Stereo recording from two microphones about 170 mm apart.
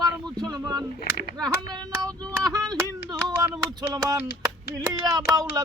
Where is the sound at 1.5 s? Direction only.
15° right (ahead or behind).